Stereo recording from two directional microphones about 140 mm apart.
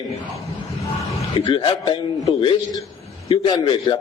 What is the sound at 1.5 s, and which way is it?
Speech, 35° left (ahead or behind).